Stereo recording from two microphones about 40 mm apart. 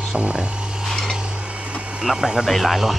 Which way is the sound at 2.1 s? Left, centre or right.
Centre.